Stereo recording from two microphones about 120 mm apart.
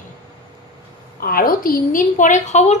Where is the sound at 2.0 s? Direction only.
90° left; by 2.7 s 75° left (ahead or behind).